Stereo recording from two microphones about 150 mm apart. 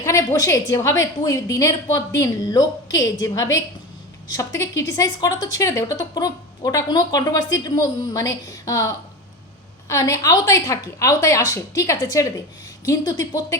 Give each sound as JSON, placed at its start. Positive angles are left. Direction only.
{"t": 0.0, "sound": "a woman's voice", "side_deg": 20}